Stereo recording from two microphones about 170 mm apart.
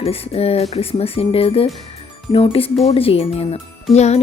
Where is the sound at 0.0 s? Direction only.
35° left (ahead or behind).